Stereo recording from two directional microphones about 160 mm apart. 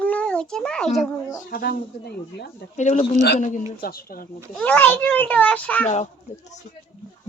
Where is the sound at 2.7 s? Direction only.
45° left (ahead or behind).